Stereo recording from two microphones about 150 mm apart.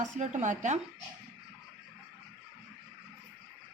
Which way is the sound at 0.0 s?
55° right (ahead or behind).